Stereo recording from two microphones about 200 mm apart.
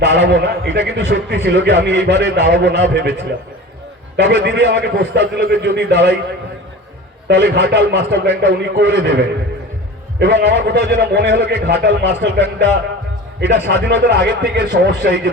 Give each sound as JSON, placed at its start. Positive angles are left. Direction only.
{"t": 0.0, "sound": "a man's voice", "side_deg": -60}
{"t": 7.3, "sound": "a man's voice", "side_deg": -55}